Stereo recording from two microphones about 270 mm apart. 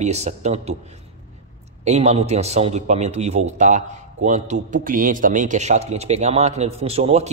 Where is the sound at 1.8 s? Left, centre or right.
Right.